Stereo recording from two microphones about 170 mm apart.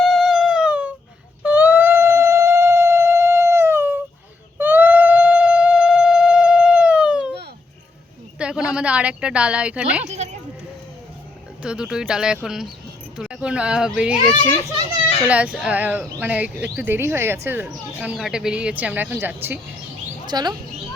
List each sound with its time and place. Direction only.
0.0 s a sound: centre (ahead or behind)
8.4 s a woman's voice: 5° right (ahead or behind)
10.0 s speech: 40° right (ahead or behind)
11.6 s speech: 5° right (ahead or behind)
15.3 s speech: 5° right (ahead or behind)
20.2 s speech: 25° right (ahead or behind)